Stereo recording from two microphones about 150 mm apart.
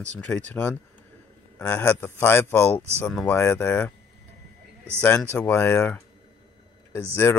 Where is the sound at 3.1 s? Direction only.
5° left (ahead or behind).